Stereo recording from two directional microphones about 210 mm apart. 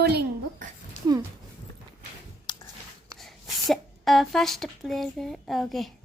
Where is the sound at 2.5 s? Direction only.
20° left (ahead or behind).